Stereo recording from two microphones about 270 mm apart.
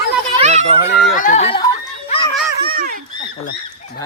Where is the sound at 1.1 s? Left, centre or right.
Left.